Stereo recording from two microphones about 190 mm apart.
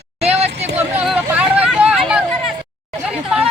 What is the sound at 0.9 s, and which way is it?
Hubbub, 5° right (ahead or behind).